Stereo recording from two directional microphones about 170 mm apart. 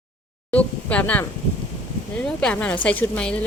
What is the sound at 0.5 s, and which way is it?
Speech, 10° left (ahead or behind).